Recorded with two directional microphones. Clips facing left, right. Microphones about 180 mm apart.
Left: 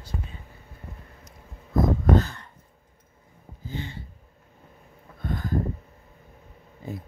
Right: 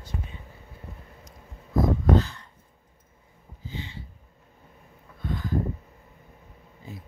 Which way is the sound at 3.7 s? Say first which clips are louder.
Left 4 dB; 50° left (ahead or behind).